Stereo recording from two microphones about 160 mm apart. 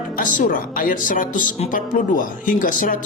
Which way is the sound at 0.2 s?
55° left (ahead or behind).